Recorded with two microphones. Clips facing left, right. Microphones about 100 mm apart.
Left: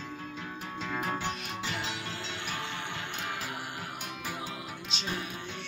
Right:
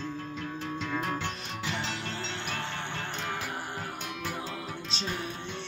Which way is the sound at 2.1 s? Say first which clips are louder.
Right 2 dB; 30° right (ahead or behind).